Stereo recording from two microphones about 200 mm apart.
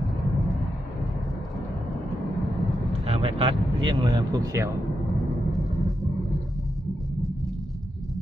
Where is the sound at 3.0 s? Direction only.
30° right (ahead or behind).